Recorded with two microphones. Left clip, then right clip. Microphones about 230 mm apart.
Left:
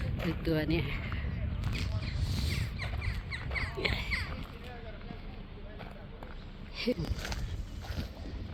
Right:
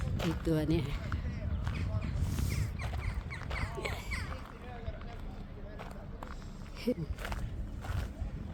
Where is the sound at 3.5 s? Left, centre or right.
Centre.